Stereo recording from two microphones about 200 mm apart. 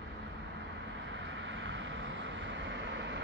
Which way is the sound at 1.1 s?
65° right (ahead or behind).